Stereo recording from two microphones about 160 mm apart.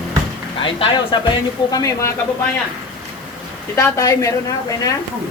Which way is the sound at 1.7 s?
20° left (ahead or behind).